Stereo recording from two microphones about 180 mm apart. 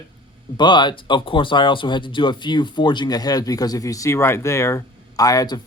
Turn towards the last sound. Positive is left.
turn(degrees=20)  # may be behind; listen again after turning